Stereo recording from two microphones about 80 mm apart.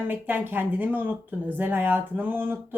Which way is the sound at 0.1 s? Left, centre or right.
Right.